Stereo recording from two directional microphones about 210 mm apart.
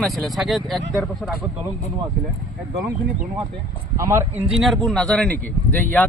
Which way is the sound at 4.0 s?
15° right (ahead or behind).